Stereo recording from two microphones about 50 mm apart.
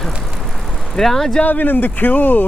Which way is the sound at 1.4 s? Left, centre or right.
Left.